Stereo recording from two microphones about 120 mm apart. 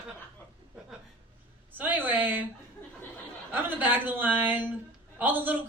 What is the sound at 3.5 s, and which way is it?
Speech, 15° right (ahead or behind).